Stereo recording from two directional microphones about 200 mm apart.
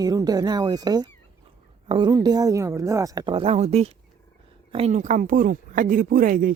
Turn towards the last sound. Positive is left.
turn(degrees=-45)  # may be behind; listen again after turning